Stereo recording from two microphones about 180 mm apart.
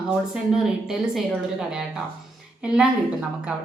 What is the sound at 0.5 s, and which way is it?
Speech, centre (ahead or behind).